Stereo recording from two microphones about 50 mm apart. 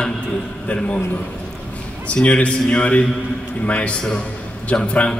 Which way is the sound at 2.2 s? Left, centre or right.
Left.